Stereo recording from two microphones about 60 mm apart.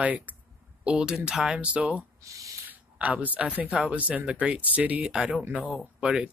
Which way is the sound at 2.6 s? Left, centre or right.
Right.